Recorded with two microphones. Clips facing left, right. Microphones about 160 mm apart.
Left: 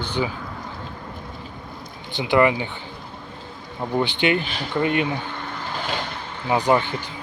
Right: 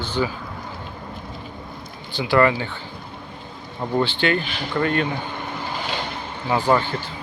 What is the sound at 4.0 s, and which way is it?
Speech, 20° left (ahead or behind).